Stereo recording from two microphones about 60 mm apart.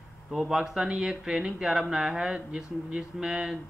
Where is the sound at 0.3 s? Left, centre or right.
Centre.